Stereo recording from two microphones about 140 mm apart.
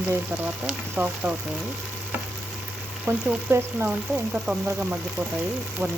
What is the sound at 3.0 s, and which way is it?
Frying, 15° right (ahead or behind).